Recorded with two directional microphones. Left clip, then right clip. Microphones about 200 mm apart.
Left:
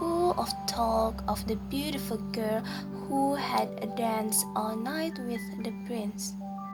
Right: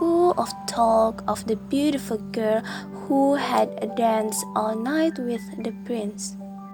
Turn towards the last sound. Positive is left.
turn(degrees=-30)  # may be behind; listen again after turning